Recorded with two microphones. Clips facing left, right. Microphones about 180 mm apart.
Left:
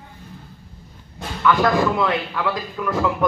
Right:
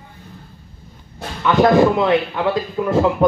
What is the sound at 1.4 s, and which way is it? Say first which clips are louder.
Speech: right 5 dB; 25° right (ahead or behind).